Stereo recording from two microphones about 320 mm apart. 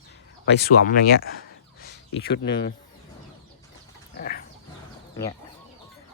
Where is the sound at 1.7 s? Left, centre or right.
Left.